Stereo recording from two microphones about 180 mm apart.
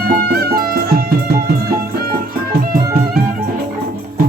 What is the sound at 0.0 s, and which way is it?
Music, 60° right (ahead or behind).